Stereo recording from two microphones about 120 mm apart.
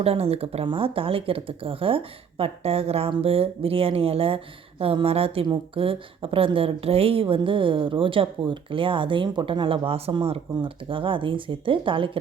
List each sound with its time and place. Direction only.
0.0 s a woman's voice: 55° right (ahead or behind)